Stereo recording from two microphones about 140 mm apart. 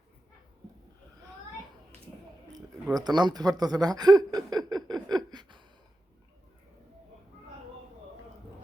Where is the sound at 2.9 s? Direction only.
30° right (ahead or behind).